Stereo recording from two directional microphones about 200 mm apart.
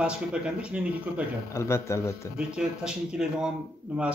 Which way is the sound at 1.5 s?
15° left (ahead or behind).